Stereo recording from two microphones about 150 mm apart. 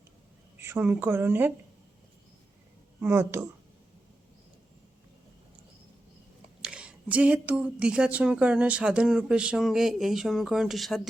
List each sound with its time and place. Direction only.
0.6 s a woman's voice: 15° right (ahead or behind)
3.0 s a woman's voice: 15° right (ahead or behind)
6.6 s speech: 5° right (ahead or behind)